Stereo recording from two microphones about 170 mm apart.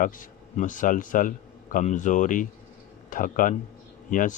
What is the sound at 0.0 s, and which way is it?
Speech, 50° left (ahead or behind).